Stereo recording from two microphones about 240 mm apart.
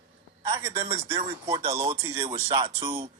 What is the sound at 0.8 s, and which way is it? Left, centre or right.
Speech, right.